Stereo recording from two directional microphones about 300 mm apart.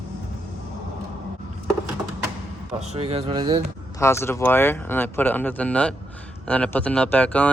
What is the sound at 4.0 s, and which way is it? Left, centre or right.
Speech, centre.